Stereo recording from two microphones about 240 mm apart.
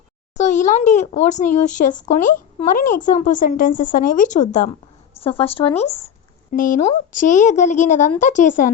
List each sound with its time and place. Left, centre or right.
0.3 s a child's voice: left